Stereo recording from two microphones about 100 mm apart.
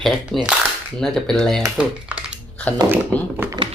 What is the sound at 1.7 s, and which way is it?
Speech, 10° right (ahead or behind).